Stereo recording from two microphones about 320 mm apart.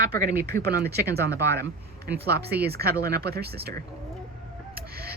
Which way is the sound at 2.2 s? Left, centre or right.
Right.